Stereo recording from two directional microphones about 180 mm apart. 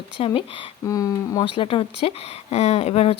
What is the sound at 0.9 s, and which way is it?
Speech, 20° left (ahead or behind).